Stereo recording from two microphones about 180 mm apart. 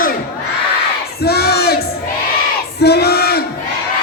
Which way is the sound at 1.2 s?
60° left (ahead or behind).